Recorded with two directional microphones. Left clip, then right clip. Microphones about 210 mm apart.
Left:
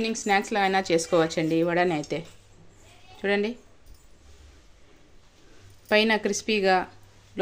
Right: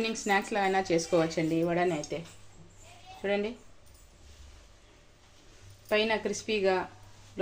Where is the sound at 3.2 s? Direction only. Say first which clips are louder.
Left 5 dB; 45° left (ahead or behind).